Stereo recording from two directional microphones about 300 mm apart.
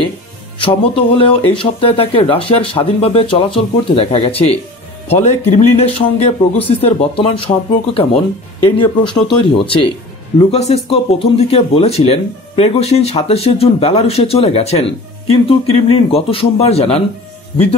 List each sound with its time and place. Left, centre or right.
0.6 s speech: centre